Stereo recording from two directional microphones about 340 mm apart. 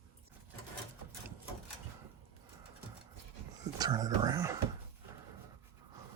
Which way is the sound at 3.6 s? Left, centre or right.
Centre.